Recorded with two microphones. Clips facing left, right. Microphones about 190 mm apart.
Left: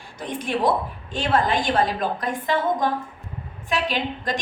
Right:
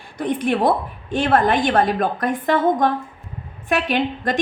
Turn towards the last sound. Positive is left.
turn(degrees=-55)  # may be behind; listen again after turning